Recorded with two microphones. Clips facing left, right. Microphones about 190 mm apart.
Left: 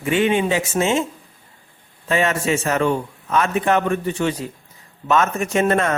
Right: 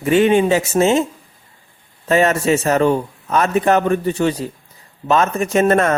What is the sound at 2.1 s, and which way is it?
Speech, 40° right (ahead or behind).